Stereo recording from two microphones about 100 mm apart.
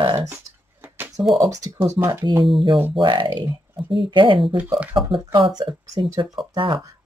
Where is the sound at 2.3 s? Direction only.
50° right (ahead or behind).